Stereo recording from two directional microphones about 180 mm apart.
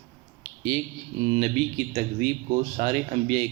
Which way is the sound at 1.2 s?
40° right (ahead or behind).